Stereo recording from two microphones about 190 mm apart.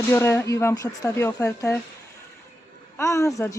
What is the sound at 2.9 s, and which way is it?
Speech, 15° left (ahead or behind).